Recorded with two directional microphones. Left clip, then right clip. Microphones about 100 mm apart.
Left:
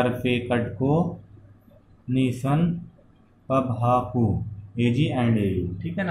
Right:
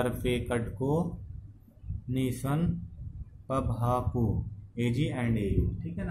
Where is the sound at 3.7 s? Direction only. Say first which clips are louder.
Left 8 dB; 50° right (ahead or behind).